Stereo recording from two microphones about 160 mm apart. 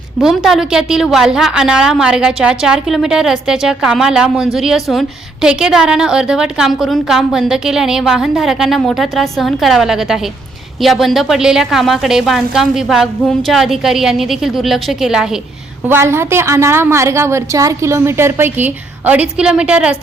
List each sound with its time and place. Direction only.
0.2 s a woman's voice: centre (ahead or behind)
15.9 s a woman's voice: 15° right (ahead or behind)